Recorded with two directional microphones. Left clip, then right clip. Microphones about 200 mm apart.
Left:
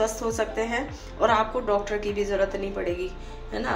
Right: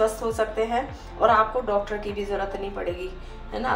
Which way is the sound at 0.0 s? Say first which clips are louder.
Right 2 dB; 25° left (ahead or behind).